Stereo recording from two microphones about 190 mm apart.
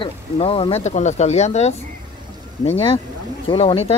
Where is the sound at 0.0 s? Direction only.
30° left (ahead or behind).